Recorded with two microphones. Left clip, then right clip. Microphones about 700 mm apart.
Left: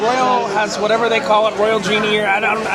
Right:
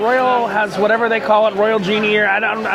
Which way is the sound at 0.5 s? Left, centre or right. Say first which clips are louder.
Right 1 dB; right.